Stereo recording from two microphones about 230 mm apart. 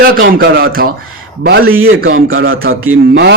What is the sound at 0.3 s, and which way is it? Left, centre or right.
Speech, right.